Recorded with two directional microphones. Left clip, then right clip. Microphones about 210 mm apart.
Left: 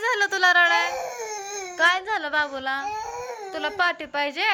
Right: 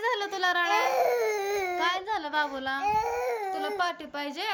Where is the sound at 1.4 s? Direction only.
25° right (ahead or behind).